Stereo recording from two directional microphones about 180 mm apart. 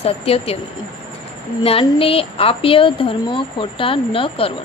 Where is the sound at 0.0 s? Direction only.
35° left (ahead or behind).